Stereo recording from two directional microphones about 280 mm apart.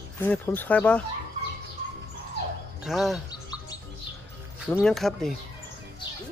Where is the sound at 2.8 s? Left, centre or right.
Centre.